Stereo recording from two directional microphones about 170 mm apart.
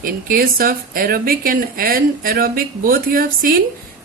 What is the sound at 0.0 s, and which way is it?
Speech, 55° right (ahead or behind).